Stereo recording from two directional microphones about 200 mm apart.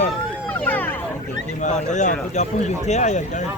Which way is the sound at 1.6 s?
35° left (ahead or behind).